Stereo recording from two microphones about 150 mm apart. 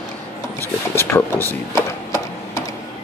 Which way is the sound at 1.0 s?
15° left (ahead or behind).